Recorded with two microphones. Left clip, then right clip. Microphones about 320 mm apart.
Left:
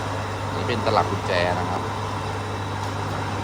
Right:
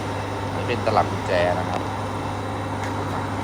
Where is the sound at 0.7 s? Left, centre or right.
Centre.